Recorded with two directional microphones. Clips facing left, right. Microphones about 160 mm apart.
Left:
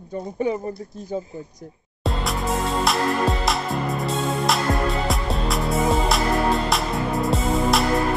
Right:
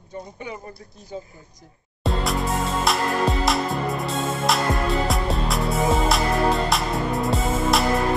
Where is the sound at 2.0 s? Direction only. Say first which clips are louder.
Right 1 dB; centre (ahead or behind).